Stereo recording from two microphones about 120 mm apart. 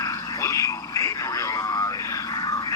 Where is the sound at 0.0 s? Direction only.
25° left (ahead or behind).